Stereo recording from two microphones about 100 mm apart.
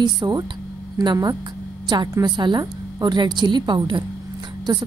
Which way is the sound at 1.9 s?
50° right (ahead or behind).